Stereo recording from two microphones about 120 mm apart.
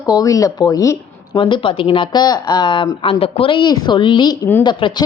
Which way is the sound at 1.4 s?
45° left (ahead or behind).